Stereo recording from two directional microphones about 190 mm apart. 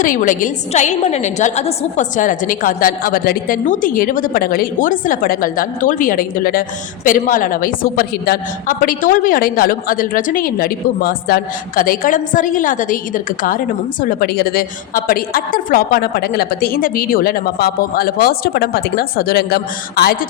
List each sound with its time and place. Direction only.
0.0 s a woman's voice: 45° left (ahead or behind)